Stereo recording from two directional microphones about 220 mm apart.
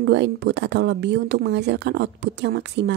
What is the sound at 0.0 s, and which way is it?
A woman's voice, 50° right (ahead or behind).